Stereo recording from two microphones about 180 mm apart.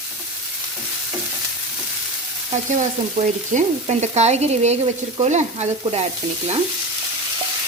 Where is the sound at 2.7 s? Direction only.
40° right (ahead or behind).